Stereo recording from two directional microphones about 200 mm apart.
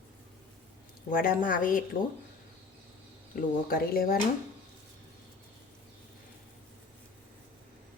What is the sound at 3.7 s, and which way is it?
Speech, 45° left (ahead or behind).